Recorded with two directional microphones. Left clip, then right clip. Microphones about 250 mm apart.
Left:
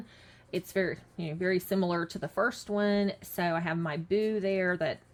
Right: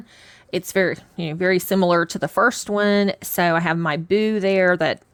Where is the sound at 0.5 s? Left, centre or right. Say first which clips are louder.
Right 11 dB; right.